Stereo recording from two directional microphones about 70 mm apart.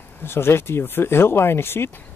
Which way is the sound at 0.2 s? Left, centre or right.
Left.